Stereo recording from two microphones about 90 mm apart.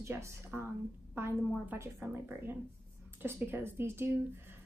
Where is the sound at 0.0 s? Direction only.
30° right (ahead or behind).